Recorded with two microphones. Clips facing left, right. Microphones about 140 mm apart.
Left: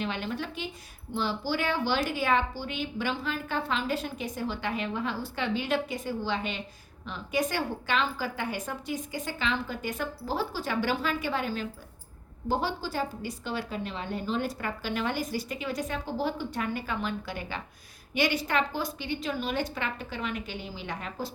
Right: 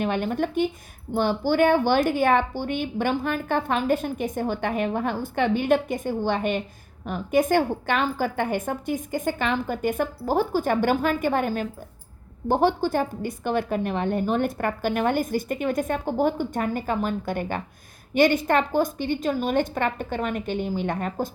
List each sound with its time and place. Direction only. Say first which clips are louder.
0.0 s a woman's voice: right 8 dB; 50° right (ahead or behind)